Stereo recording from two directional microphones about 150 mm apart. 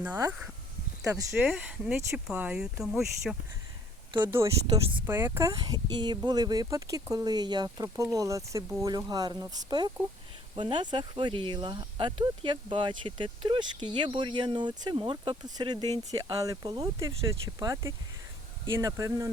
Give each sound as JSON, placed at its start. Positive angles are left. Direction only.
{"t": 1.4, "sound": "speech", "side_deg": -5}
{"t": 4.2, "sound": "speech", "side_deg": -15}
{"t": 4.6, "sound": "speech", "side_deg": -35}
{"t": 5.0, "sound": "speech", "side_deg": -15}